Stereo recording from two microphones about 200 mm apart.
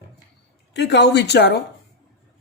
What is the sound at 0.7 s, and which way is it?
Speech, 55° left (ahead or behind).